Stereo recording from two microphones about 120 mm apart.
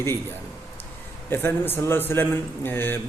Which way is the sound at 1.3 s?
20° left (ahead or behind).